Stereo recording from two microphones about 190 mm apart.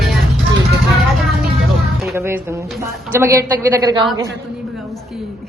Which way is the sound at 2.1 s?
15° right (ahead or behind).